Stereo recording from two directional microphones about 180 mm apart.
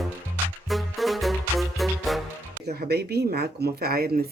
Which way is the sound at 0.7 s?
Centre (ahead or behind).